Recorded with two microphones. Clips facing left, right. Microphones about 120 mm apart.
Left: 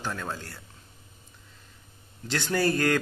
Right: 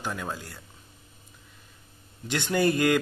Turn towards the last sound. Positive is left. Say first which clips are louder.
# right 2 dB
turn(degrees=-15)  # may be behind; listen again after turning